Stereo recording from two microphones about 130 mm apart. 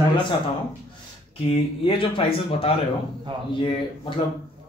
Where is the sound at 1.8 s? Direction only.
45° left (ahead or behind).